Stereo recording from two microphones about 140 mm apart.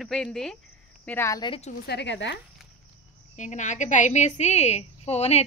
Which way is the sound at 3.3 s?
60° left (ahead or behind).